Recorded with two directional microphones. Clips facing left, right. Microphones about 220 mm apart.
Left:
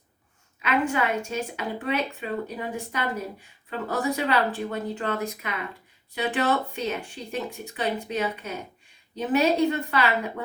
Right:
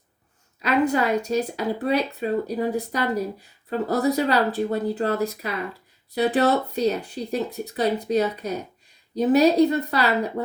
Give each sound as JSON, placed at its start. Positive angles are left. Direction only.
{"t": 0.6, "sound": "speech", "side_deg": -35}